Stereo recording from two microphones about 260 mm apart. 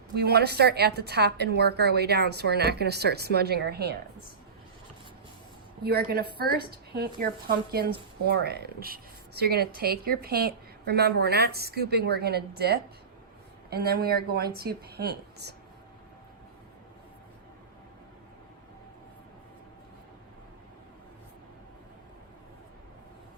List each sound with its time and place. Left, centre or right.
0.1 s speech: right
5.8 s a woman's voice: right